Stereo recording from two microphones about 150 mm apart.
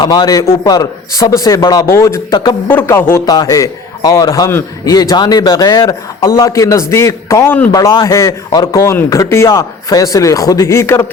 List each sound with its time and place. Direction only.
0.0 s a man's voice: 30° left (ahead or behind)
2.6 s a man's voice: 15° left (ahead or behind)
7.7 s a man's voice: 25° left (ahead or behind)